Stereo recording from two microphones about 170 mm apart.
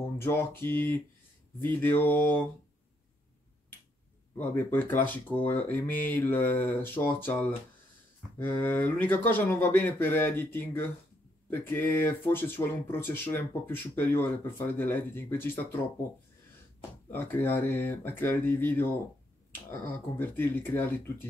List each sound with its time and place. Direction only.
0.2 s speech: 15° left (ahead or behind)
4.4 s speech: 10° left (ahead or behind)
17.1 s speech: 10° left (ahead or behind)